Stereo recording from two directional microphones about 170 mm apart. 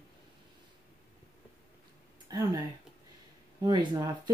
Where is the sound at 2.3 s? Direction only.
25° right (ahead or behind).